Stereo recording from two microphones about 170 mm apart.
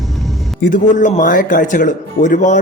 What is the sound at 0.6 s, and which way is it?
Speech, 50° left (ahead or behind).